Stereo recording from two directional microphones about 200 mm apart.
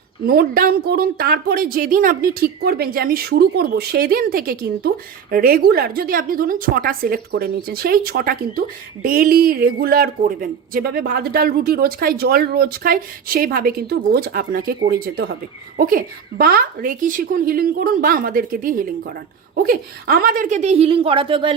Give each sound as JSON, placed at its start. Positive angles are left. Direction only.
{"t": 0.3, "sound": "a woman's voice", "side_deg": -50}